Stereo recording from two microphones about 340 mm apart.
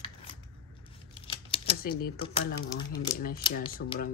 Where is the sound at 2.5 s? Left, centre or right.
Left.